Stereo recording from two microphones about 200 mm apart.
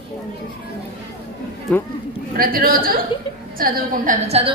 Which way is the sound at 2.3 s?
45° right (ahead or behind).